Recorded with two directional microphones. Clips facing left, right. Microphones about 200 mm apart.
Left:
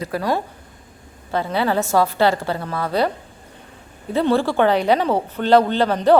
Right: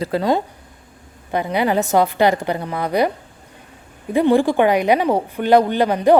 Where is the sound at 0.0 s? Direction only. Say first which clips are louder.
Right 4 dB; 25° right (ahead or behind).